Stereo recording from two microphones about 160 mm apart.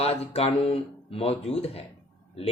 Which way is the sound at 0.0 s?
40° left (ahead or behind).